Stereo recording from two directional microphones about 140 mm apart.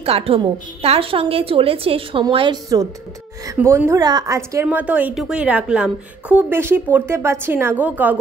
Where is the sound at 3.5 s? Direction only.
15° right (ahead or behind).